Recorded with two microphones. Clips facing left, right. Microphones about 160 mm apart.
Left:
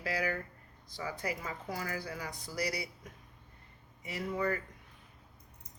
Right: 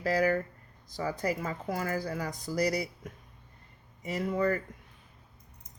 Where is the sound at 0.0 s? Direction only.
45° right (ahead or behind).